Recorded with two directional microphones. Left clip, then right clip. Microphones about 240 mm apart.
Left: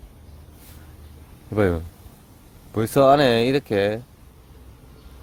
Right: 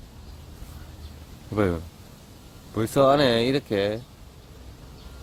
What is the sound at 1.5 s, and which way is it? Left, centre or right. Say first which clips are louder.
Speech: left 4 dB; left.